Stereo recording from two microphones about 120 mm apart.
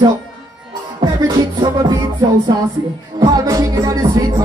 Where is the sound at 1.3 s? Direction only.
30° right (ahead or behind).